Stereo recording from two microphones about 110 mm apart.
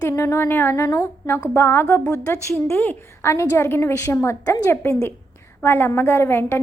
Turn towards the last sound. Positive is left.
turn(degrees=20)  # may be behind; listen again after turning